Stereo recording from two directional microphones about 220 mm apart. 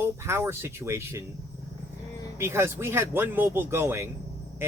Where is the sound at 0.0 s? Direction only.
10° right (ahead or behind).